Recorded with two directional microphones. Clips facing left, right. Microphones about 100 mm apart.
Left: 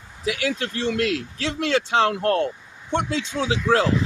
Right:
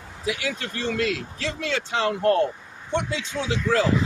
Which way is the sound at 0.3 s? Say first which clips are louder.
Left 3 dB; 60° left (ahead or behind).